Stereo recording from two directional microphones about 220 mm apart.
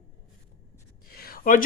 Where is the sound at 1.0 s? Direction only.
45° left (ahead or behind).